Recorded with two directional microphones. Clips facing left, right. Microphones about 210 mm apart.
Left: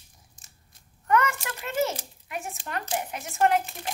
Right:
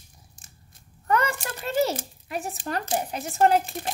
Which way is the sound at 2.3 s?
35° right (ahead or behind).